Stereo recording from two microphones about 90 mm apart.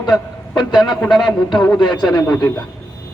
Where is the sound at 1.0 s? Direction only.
5° left (ahead or behind).